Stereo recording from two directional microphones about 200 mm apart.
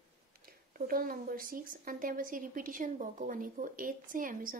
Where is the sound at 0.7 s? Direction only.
45° right (ahead or behind).